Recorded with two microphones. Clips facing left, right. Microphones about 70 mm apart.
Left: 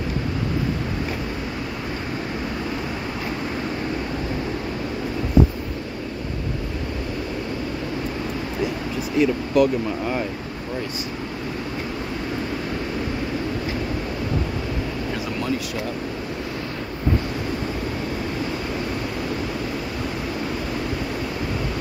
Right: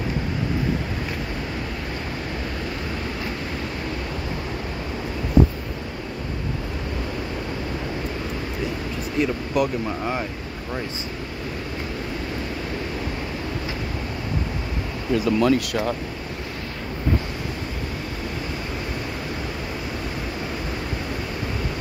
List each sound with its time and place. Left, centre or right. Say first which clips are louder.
9.2 s speech: left 4 dB; centre
15.4 s speech: right 6 dB; right